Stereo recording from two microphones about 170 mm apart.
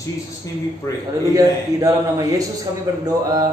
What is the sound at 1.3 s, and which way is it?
A man's voice, 20° right (ahead or behind).